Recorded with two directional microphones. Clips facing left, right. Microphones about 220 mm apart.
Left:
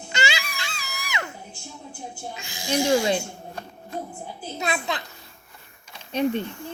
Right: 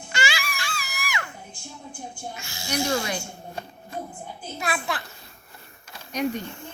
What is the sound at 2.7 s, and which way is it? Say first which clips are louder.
Speech: left 5 dB; 15° left (ahead or behind).